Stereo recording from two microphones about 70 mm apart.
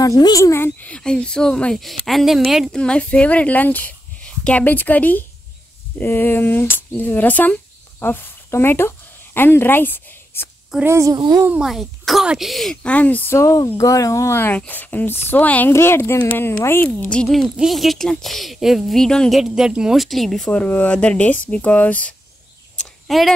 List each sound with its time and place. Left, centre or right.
0.0 s speech: left
0.7 s speech: centre
2.7 s speech: centre; by 10.5 s left
10.9 s a child's voice: right
11.1 s a child's voice: right
11.6 s speech: centre
12.8 s speech: left
13.3 s speech: left
14.7 s speech: left
15.7 s speech: left
17.6 s speech: centre
19.3 s speech: centre
20.5 s speech: left
23.0 s speech: centre